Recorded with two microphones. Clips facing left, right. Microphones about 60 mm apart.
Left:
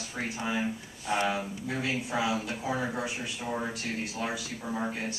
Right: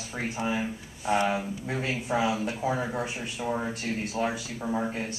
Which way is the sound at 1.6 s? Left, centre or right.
Right.